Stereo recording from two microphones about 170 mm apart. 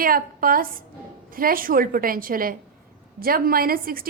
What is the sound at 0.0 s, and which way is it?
A woman's voice, 55° right (ahead or behind).